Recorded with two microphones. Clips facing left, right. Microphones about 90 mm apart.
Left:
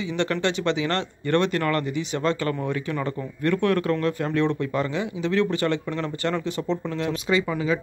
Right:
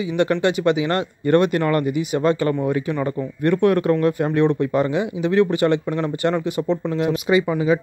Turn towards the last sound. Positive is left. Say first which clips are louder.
# right 5 dB
turn(degrees=-20)  # may be behind; listen again after turning